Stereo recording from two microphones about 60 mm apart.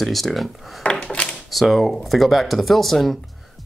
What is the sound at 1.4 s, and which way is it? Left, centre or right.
Speech, centre.